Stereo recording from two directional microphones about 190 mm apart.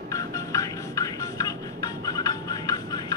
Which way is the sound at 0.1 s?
15° left (ahead or behind).